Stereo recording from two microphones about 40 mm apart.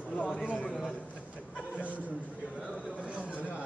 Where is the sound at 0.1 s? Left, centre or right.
Left.